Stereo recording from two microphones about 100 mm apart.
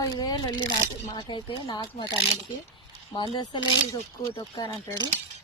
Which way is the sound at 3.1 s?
55° left (ahead or behind).